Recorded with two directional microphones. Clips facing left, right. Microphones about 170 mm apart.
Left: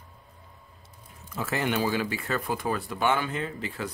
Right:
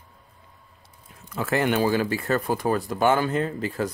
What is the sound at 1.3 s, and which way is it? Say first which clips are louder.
Speech: right 5 dB; 55° right (ahead or behind).